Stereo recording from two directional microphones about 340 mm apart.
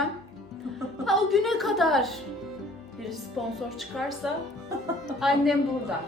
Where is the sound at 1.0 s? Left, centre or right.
Centre.